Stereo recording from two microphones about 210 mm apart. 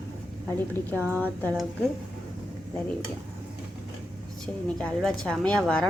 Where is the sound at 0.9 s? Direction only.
10° right (ahead or behind).